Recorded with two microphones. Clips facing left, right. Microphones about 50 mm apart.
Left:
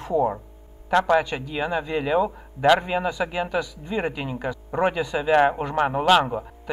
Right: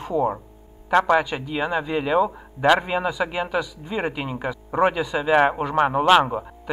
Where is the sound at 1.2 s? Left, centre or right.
Centre.